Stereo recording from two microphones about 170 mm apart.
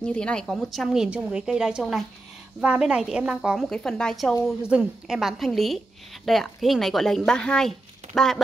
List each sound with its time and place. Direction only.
0.0 s a woman's voice: 5° left (ahead or behind)